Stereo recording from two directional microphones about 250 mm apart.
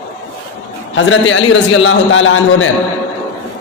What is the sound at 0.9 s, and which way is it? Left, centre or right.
A man's voice, left.